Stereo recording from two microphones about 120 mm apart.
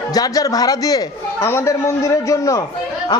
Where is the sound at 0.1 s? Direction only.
30° left (ahead or behind).